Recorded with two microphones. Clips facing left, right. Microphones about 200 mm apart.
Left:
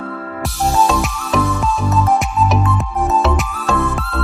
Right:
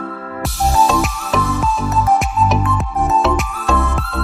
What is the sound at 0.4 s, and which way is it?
Music, centre (ahead or behind).